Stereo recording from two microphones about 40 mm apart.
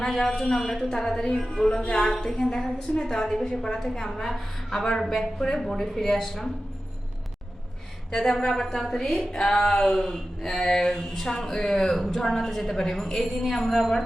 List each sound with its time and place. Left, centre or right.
0.0 s speech: centre
4.7 s speech: centre
8.1 s a woman's voice: centre